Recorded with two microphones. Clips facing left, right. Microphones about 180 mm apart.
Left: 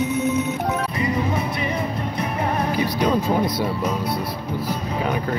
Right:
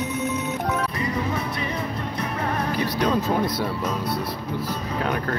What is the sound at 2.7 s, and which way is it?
Music, 10° left (ahead or behind).